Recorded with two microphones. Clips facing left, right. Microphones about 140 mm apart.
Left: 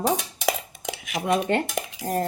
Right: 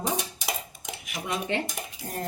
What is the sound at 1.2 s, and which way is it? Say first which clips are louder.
Speech: left 7 dB; 55° left (ahead or behind).